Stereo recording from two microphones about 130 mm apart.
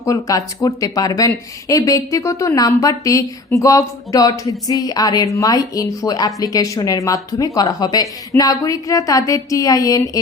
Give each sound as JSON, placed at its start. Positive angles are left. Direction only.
{"t": 0.0, "sound": "speech", "side_deg": 25}